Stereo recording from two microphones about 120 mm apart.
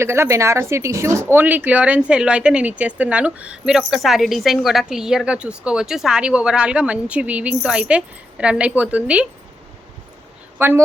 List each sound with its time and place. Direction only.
0.0 s speech: 20° right (ahead or behind)
10.6 s a woman's voice: 20° right (ahead or behind)